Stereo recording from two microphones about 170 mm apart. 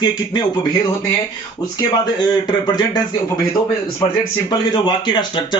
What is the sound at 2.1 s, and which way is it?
Speech, 25° left (ahead or behind).